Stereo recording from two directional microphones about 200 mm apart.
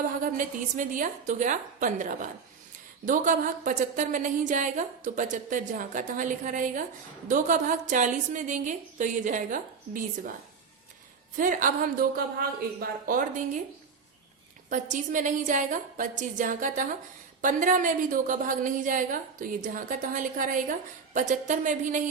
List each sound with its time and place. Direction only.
0.2 s a woman's voice: 40° right (ahead or behind)
11.3 s a woman's voice: 45° right (ahead or behind)
14.7 s a woman's voice: 40° right (ahead or behind)